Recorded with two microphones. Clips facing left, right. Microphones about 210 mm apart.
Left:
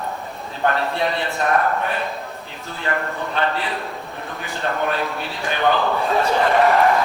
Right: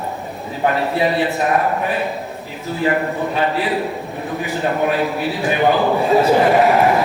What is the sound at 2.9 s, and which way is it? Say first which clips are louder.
A man's voice: right 5 dB; 5° right (ahead or behind).